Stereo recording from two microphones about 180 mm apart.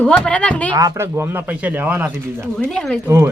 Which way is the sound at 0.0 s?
5° left (ahead or behind).